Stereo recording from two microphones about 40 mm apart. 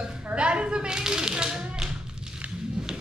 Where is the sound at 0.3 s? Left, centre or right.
Right.